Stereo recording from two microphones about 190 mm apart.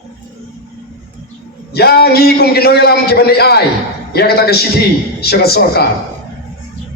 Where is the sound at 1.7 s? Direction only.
55° left (ahead or behind).